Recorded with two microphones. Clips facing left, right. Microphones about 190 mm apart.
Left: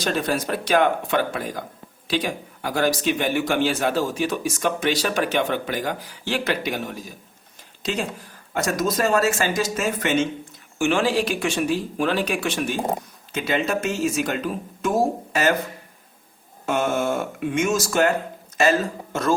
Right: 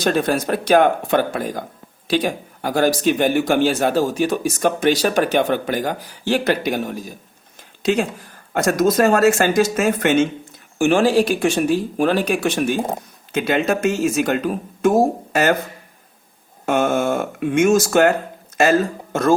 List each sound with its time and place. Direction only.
0.0 s a man's voice: 50° right (ahead or behind)
8.5 s a man's voice: 50° right (ahead or behind)
16.6 s a man's voice: 55° right (ahead or behind)